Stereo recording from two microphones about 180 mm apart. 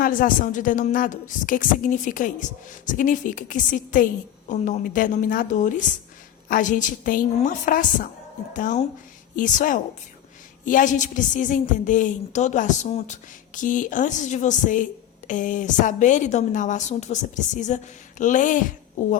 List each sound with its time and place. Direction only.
0.0 s a woman's voice: 50° left (ahead or behind)